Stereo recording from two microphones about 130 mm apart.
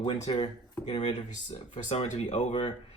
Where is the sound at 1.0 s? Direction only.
60° left (ahead or behind).